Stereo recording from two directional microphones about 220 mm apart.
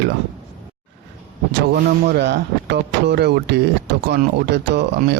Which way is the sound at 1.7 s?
50° right (ahead or behind).